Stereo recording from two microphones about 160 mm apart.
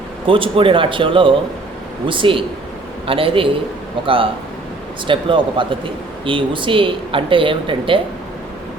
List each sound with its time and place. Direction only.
0.3 s speech: 35° right (ahead or behind)